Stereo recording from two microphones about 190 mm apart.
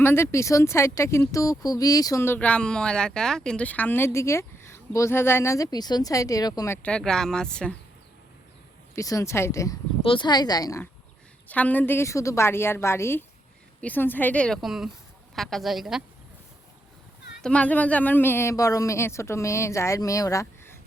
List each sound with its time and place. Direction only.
0.0 s speech: 10° left (ahead or behind)
6.8 s speech: 5° left (ahead or behind)
9.0 s speech: 15° left (ahead or behind)
10.0 s a woman's voice: 25° left (ahead or behind); by 16.0 s centre (ahead or behind)
17.4 s speech: 5° left (ahead or behind)